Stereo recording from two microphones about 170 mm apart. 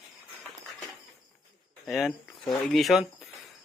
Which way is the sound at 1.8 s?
Centre (ahead or behind).